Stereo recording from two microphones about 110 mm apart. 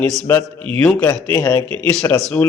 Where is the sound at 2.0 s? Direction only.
30° left (ahead or behind).